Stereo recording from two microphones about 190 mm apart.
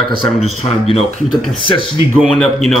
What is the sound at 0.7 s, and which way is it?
Speech, 30° left (ahead or behind).